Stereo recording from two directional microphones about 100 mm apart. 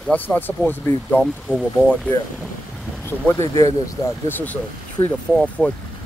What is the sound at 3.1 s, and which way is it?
Speech, 25° left (ahead or behind).